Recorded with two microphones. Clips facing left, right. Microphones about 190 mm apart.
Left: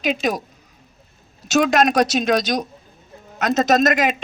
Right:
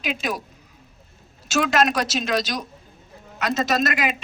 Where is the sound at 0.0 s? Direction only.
45° left (ahead or behind).